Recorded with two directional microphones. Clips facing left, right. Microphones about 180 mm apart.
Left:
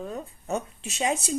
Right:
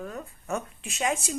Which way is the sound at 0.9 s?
35° left (ahead or behind).